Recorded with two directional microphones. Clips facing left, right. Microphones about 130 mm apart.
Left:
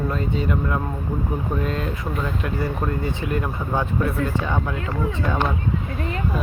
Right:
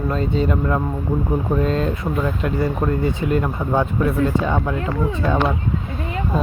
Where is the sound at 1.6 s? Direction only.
30° right (ahead or behind).